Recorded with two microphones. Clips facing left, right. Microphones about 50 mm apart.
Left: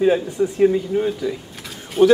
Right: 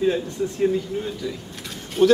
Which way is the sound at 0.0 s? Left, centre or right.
Centre.